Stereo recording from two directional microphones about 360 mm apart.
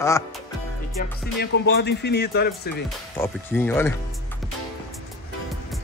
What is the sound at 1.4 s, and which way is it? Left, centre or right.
Speech, left.